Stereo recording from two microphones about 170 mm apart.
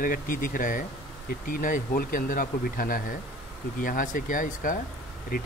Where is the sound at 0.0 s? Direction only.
55° left (ahead or behind).